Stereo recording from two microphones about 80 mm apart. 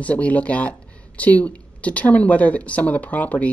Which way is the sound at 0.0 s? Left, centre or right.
Centre.